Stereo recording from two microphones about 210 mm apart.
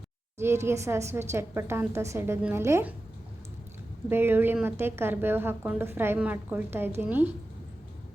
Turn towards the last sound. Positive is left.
turn(degrees=-10)  # may be behind; listen again after turning